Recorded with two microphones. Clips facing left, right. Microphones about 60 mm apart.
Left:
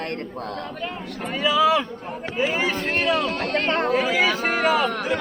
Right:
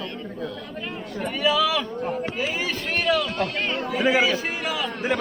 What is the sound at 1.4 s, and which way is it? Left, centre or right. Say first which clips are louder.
Speech: left 3 dB; left.